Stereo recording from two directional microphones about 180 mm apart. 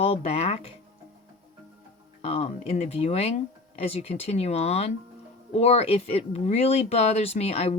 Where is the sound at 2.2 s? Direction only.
35° left (ahead or behind).